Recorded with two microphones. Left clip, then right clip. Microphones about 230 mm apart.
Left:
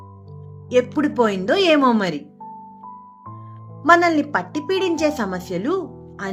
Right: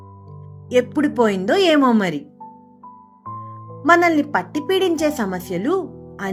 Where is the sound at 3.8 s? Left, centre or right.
Right.